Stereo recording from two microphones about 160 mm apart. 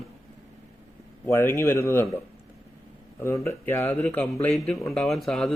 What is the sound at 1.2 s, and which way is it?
Speech, 15° left (ahead or behind).